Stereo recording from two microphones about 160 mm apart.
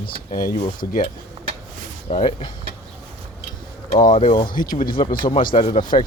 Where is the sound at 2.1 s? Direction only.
35° left (ahead or behind).